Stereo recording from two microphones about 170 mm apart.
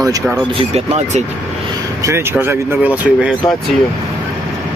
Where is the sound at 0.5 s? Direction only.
40° right (ahead or behind).